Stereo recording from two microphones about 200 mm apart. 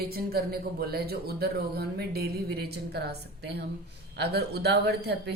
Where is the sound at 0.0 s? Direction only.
50° right (ahead or behind).